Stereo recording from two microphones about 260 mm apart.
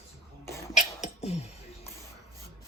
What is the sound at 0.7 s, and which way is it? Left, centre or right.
Beatboxing, left.